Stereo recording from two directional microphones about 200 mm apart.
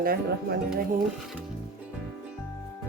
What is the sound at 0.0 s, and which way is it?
Speech, 45° right (ahead or behind).